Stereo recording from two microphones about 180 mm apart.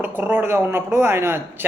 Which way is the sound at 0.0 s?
10° right (ahead or behind).